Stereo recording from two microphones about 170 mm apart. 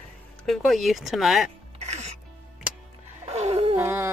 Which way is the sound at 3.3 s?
40° right (ahead or behind).